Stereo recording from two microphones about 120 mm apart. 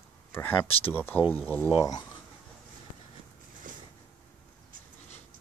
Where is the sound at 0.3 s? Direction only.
20° left (ahead or behind).